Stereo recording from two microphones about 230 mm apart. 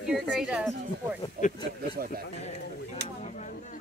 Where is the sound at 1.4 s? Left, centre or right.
Right.